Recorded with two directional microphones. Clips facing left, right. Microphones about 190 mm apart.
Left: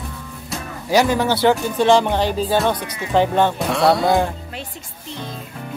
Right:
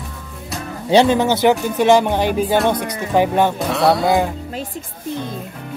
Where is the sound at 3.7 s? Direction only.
Centre (ahead or behind).